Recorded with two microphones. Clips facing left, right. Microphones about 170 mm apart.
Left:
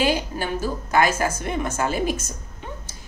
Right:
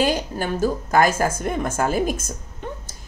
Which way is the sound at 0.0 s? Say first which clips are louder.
Right 1 dB; 45° right (ahead or behind).